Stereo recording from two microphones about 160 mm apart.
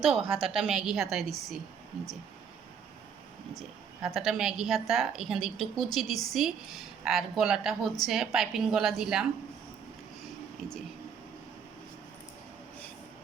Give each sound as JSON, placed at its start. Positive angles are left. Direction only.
{"t": 0.0, "sound": "a woman's voice", "side_deg": 0}
{"t": 0.3, "sound": "a woman's voice", "side_deg": -35}
{"t": 0.5, "sound": "a woman's voice", "side_deg": -5}
{"t": 4.0, "sound": "a woman's voice", "side_deg": -5}